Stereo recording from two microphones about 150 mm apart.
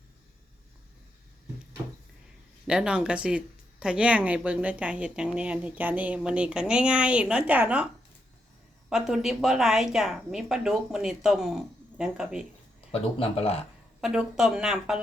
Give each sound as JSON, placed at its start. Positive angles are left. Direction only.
{"t": 2.6, "sound": "speech", "side_deg": -5}
{"t": 8.9, "sound": "speech", "side_deg": 0}
{"t": 12.9, "sound": "speech", "side_deg": 40}
{"t": 14.0, "sound": "speech", "side_deg": -5}